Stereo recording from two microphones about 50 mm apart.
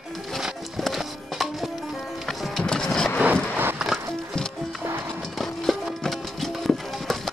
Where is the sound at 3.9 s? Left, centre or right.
Centre.